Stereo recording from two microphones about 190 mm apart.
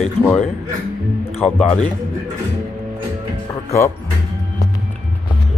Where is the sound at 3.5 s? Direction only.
15° left (ahead or behind).